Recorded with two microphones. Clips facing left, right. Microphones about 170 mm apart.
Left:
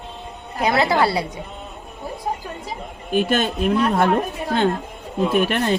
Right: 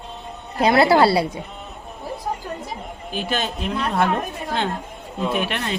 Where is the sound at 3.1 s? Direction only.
50° left (ahead or behind).